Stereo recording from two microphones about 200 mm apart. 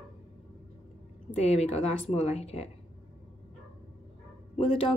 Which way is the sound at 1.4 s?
30° left (ahead or behind).